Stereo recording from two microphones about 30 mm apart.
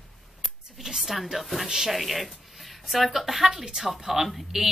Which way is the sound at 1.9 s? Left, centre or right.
Centre.